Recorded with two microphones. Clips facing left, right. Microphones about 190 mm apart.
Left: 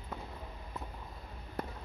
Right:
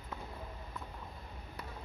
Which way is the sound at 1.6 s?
50° left (ahead or behind).